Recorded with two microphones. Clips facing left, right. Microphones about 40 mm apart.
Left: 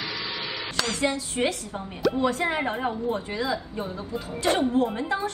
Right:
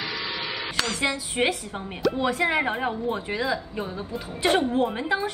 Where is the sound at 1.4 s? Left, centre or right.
Right.